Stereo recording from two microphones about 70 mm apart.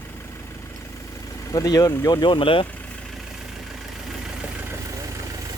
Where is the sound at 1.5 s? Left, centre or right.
Left.